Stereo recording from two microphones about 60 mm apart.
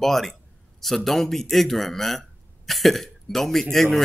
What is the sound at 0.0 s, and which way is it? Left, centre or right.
A man's voice, centre.